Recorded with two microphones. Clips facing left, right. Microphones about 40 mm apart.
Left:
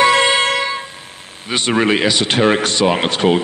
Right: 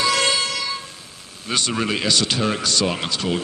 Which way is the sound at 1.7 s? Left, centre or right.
Left.